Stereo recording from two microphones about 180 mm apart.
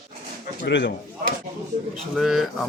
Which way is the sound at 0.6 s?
75° left (ahead or behind).